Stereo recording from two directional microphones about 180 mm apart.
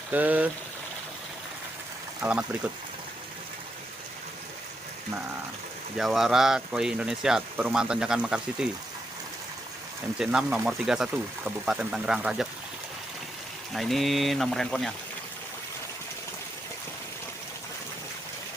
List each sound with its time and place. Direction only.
0.1 s speech: 10° right (ahead or behind)
2.2 s speech: 10° right (ahead or behind)
6.0 s speech: centre (ahead or behind)
10.2 s speech: 5° right (ahead or behind)
13.7 s speech: centre (ahead or behind)